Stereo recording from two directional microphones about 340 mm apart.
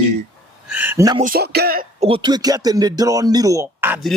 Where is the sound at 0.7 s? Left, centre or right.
Centre.